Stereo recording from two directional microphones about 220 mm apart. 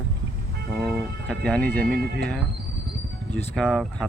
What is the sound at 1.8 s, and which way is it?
Speech, 45° right (ahead or behind).